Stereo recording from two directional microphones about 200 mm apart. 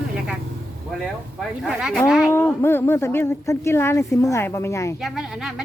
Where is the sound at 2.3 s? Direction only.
10° left (ahead or behind).